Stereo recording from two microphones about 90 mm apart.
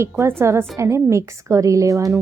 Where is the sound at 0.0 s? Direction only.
30° right (ahead or behind).